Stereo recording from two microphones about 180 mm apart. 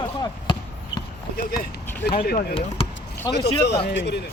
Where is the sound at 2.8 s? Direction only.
30° left (ahead or behind).